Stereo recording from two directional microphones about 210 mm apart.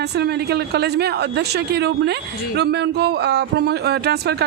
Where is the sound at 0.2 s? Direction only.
50° right (ahead or behind).